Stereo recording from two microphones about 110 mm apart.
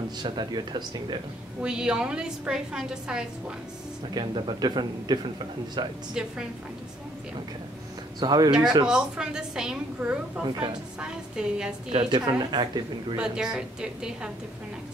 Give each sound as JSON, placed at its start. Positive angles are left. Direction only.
{"t": 0.2, "sound": "speech", "side_deg": -40}
{"t": 1.6, "sound": "a woman's voice", "side_deg": -5}
{"t": 4.1, "sound": "a man's voice", "side_deg": -45}
{"t": 6.2, "sound": "a woman's voice", "side_deg": -5}
{"t": 8.2, "sound": "speech", "side_deg": -35}
{"t": 8.5, "sound": "a woman's voice", "side_deg": -5}
{"t": 12.1, "sound": "speech", "side_deg": -40}
{"t": 13.2, "sound": "a woman's voice", "side_deg": -5}